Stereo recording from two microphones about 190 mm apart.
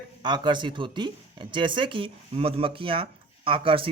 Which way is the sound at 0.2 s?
25° right (ahead or behind).